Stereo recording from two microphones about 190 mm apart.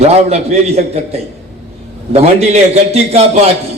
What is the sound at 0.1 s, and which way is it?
Speech, 35° right (ahead or behind).